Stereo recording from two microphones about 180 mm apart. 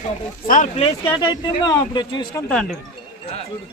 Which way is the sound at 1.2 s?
20° left (ahead or behind).